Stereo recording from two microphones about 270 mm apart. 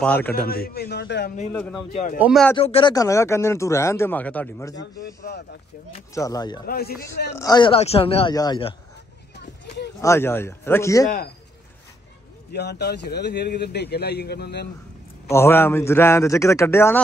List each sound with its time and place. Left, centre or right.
0.0 s speech: centre
0.5 s speech: left
1.5 s speech: centre
2.5 s speech: centre
5.0 s speech: left
5.9 s speech: centre
6.7 s speech: left
7.3 s speech: centre
10.0 s speech: centre
12.5 s speech: left
15.2 s speech: centre